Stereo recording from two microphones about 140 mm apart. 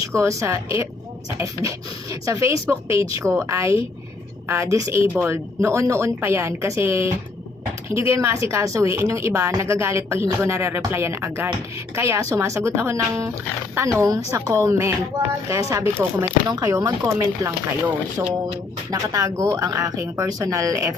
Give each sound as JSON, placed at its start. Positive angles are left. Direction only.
{"t": 0.0, "sound": "a woman's voice", "side_deg": -20}